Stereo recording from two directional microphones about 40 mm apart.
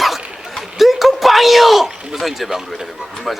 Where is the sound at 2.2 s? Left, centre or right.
Centre.